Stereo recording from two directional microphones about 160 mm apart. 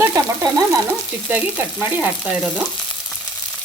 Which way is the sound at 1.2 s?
10° right (ahead or behind).